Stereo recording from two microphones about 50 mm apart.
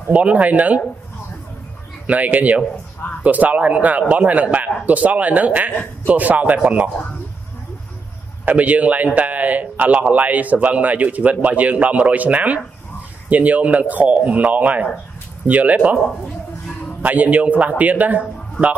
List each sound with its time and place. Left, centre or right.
0.1 s speech: right
2.0 s a man's voice: right
8.5 s a man's voice: right
17.0 s a man's voice: right